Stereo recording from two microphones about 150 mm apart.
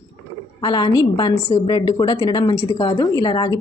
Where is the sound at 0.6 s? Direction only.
30° left (ahead or behind).